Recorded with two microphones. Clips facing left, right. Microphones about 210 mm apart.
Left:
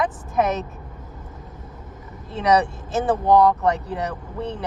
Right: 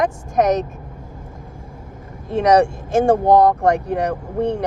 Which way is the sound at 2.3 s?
65° right (ahead or behind).